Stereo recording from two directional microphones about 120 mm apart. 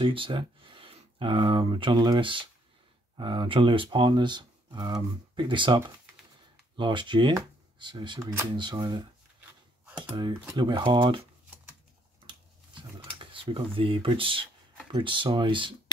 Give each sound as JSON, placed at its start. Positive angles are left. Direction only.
{"t": 0.0, "sound": "speech", "side_deg": -45}
{"t": 10.5, "sound": "speech", "side_deg": -40}
{"t": 13.2, "sound": "speech", "side_deg": -45}